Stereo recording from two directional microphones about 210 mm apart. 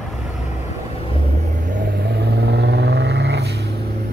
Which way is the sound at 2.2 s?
50° right (ahead or behind).